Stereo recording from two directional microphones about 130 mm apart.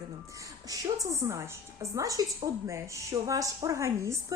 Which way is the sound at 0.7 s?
25° right (ahead or behind).